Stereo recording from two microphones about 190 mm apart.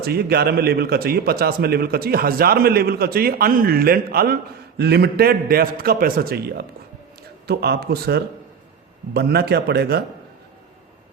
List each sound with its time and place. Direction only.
0.0 s a man's voice: 55° right (ahead or behind)